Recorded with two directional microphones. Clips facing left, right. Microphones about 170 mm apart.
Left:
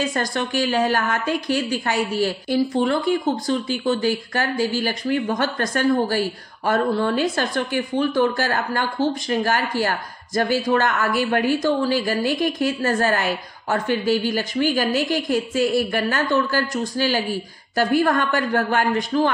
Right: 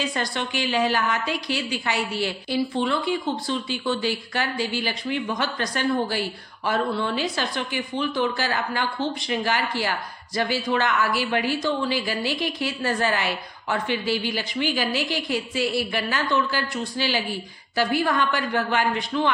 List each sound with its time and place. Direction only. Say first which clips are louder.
0.0 s a woman's voice: left 4 dB; 45° left (ahead or behind)